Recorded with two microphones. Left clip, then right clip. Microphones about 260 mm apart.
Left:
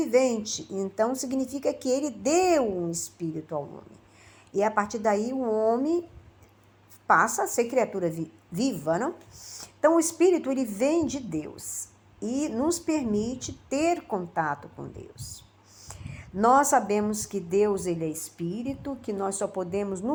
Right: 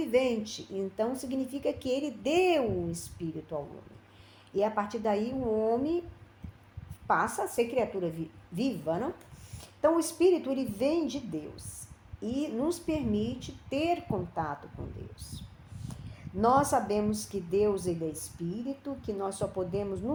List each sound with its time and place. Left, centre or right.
0.0 s speech: left
4.5 s speech: left
7.1 s speech: left
16.1 s speech: left